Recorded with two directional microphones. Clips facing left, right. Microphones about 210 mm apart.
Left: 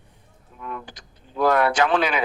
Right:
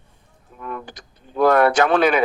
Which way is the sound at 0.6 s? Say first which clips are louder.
Right 3 dB; 50° right (ahead or behind).